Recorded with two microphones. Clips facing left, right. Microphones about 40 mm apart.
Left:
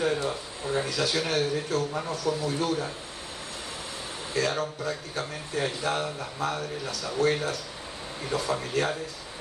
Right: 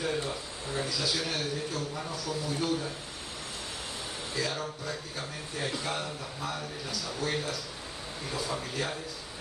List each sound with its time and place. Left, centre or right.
0.0 s a sound: left
0.8 s speech: left
4.4 s speech: left